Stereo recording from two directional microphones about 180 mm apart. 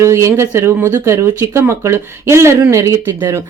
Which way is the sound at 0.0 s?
15° right (ahead or behind).